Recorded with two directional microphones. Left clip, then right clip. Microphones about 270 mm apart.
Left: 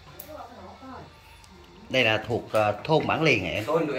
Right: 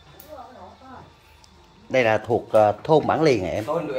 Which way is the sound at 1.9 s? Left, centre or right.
Centre.